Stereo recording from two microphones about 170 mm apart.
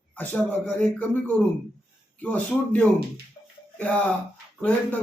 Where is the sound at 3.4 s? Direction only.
20° left (ahead or behind).